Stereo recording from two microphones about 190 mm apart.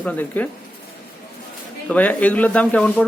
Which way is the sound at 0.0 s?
10° left (ahead or behind).